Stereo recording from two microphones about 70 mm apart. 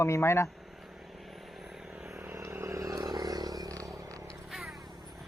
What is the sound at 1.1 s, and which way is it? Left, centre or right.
Vehicle, centre.